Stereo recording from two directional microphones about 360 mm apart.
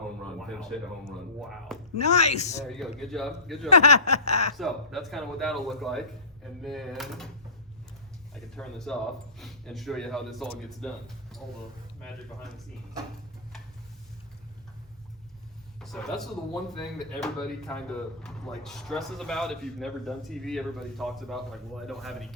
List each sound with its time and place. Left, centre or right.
0.3 s speech: centre
2.0 s a sound: centre
2.6 s speech: centre
3.7 s a sound: centre
4.5 s speech: centre
8.3 s speech: centre
15.8 s speech: centre